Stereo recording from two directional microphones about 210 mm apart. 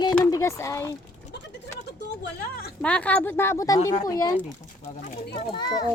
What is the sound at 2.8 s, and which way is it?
Speech, 5° left (ahead or behind).